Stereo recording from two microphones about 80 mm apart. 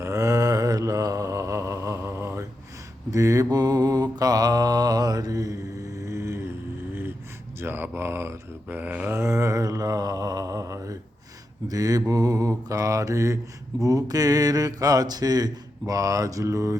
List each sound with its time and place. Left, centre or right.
0.0 s mantra: right
3.1 s mantra: right
7.6 s mantra: right
8.8 s a sound: centre
9.1 s mantra: right
13.8 s speech: right